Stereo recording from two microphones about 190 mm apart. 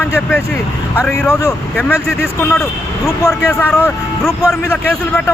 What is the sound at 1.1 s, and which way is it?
Speech, 10° left (ahead or behind).